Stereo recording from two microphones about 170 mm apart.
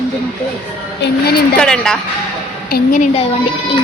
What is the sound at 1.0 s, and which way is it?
Speech, 80° left.